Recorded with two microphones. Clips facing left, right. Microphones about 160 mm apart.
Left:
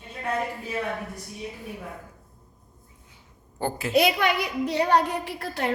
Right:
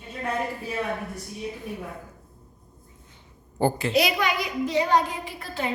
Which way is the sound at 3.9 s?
55° left (ahead or behind).